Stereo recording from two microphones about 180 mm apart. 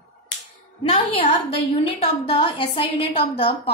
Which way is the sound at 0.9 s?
35° left (ahead or behind).